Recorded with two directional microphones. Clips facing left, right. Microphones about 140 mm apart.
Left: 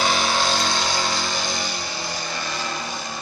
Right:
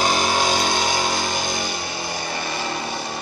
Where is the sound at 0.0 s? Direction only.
45° right (ahead or behind).